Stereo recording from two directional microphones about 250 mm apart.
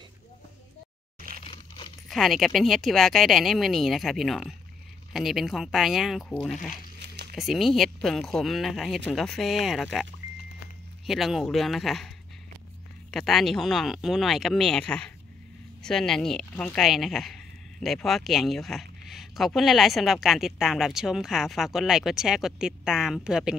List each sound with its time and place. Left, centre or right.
1.4 s a sound: left
2.0 s speech: centre
11.1 s speech: centre
13.1 s speech: centre